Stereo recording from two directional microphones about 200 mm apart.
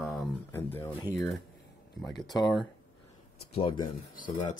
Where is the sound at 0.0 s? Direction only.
Centre (ahead or behind).